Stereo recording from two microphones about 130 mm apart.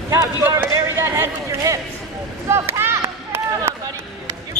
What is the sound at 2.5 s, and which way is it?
Run, 20° right (ahead or behind).